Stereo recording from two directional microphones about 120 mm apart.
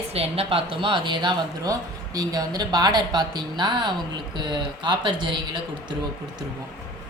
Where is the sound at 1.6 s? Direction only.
30° right (ahead or behind).